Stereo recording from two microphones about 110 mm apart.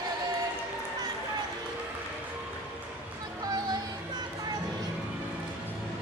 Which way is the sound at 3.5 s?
35° right (ahead or behind).